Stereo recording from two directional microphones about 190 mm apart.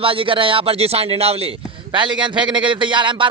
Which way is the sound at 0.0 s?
30° right (ahead or behind).